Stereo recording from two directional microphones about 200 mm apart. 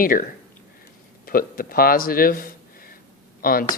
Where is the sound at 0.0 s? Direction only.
45° left (ahead or behind).